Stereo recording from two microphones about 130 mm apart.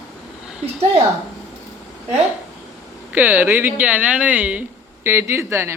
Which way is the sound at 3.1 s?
15° right (ahead or behind).